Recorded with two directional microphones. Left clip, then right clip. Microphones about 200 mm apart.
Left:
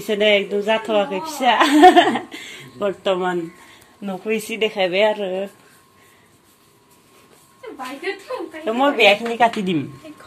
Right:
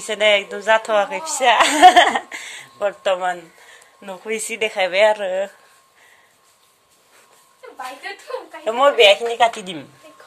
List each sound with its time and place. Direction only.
0.0 s a woman's voice: 10° right (ahead or behind); by 2.6 s 25° right (ahead or behind)
2.8 s a woman's voice: 15° right (ahead or behind)
4.3 s a woman's voice: 15° right (ahead or behind)
8.6 s a woman's voice: 15° right (ahead or behind)